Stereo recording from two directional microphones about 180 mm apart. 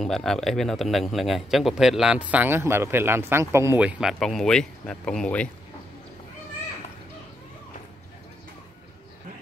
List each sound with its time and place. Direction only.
0.0 s a man's voice: centre (ahead or behind)